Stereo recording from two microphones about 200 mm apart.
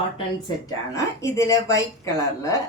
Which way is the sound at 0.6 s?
15° left (ahead or behind).